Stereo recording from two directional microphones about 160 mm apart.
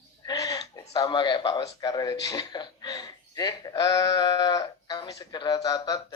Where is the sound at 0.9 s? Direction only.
25° left (ahead or behind).